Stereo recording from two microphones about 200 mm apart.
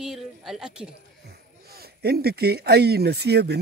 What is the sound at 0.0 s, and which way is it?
Speech, centre (ahead or behind).